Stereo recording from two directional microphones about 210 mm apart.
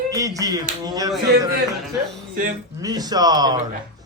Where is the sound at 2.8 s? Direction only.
20° right (ahead or behind).